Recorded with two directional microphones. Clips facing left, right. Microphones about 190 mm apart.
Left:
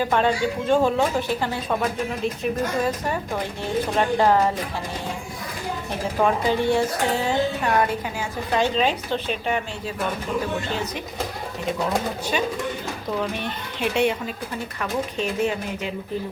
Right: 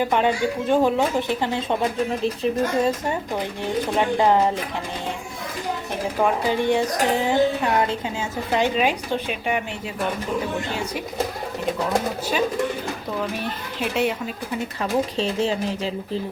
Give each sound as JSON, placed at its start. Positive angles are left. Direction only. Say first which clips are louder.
{"t": 0.0, "sound": "a woman's voice", "louder": "right 1 dB", "side_deg": -15}
{"t": 3.3, "sound": "a woman's voice", "louder": "even", "side_deg": -15}
{"t": 6.2, "sound": "a woman's voice", "louder": "even", "side_deg": -15}
{"t": 13.4, "sound": "speech", "louder": "even", "side_deg": 0}
{"t": 14.8, "sound": "speech", "louder": "right 3 dB", "side_deg": -30}